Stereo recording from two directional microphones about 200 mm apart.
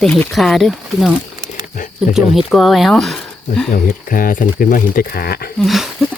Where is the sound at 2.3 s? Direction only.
Centre (ahead or behind).